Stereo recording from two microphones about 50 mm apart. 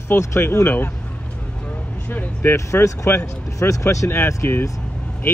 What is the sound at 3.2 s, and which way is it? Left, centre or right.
Speech, left.